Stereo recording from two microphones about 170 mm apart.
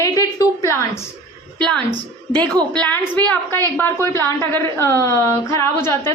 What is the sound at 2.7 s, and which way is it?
A woman's voice, 5° left (ahead or behind).